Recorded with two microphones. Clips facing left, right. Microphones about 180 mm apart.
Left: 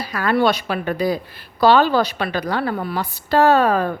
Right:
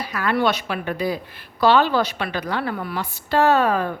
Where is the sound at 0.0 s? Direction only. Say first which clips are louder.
Left 3 dB; 35° left (ahead or behind).